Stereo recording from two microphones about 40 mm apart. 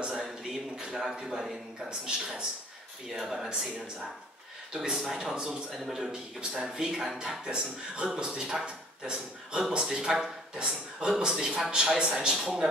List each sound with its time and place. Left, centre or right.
0.1 s a sound: centre
1.9 s speech: right
3.1 s a man's voice: centre
4.7 s a man's voice: centre
5.7 s a man's voice: centre
5.9 s a man's voice: centre